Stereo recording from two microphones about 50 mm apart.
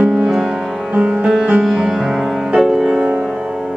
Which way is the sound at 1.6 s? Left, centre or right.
Centre.